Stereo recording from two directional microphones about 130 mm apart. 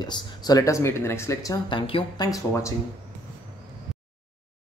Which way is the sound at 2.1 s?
30° left (ahead or behind).